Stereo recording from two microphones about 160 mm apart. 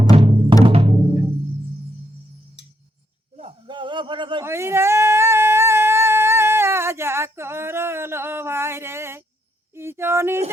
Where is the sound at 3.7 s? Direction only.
30° right (ahead or behind).